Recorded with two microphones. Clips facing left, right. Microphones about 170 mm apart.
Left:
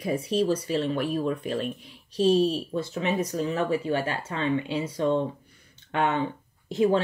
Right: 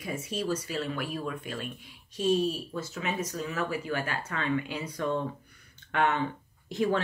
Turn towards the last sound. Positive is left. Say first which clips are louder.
# left 5 dB
turn(degrees=25)  # may be behind; listen again after turning